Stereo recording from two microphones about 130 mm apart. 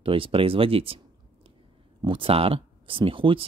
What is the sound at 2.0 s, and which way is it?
Speech, 40° right (ahead or behind).